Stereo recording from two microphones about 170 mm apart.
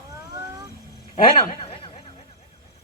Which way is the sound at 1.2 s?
30° left (ahead or behind).